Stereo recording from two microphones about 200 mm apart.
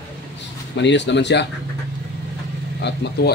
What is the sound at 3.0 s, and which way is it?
Speech, 60° left (ahead or behind).